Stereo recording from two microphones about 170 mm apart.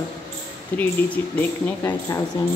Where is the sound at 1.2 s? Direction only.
10° left (ahead or behind).